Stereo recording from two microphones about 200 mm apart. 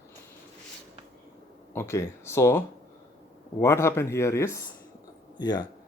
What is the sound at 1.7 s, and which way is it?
Speech, 15° left (ahead or behind).